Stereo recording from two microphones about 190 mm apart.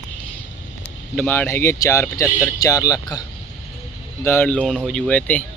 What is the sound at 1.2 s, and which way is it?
Speech, 10° left (ahead or behind).